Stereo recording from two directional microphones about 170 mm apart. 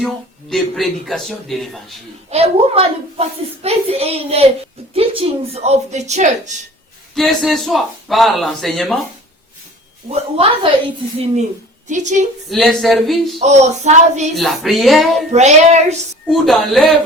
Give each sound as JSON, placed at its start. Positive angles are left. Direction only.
{"t": 0.5, "sound": "a man's voice", "side_deg": 0}
{"t": 2.3, "sound": "a woman's voice", "side_deg": -35}
{"t": 7.1, "sound": "a man's voice", "side_deg": 0}
{"t": 10.1, "sound": "a woman's voice", "side_deg": -35}
{"t": 11.9, "sound": "a woman's voice", "side_deg": -45}
{"t": 12.5, "sound": "a man's voice", "side_deg": 0}
{"t": 13.4, "sound": "a woman's voice", "side_deg": -40}
{"t": 14.3, "sound": "a man's voice", "side_deg": 0}
{"t": 15.3, "sound": "a woman's voice", "side_deg": -40}
{"t": 16.2, "sound": "a man's voice", "side_deg": 0}